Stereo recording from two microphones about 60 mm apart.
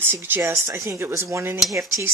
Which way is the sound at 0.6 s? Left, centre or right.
Right.